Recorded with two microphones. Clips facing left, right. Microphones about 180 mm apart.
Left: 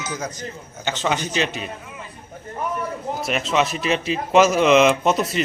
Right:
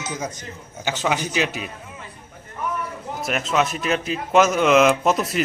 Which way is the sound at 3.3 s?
Centre (ahead or behind).